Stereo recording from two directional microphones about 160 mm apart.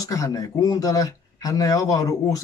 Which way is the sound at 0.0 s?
20° left (ahead or behind).